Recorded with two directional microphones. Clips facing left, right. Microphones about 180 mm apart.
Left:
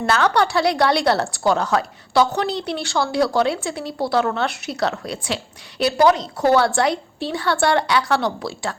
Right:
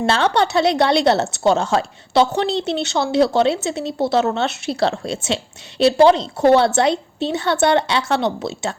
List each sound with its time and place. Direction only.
0.0 s a woman's voice: 25° right (ahead or behind)